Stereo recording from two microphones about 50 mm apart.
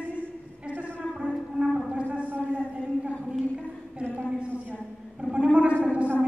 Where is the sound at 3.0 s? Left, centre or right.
Right.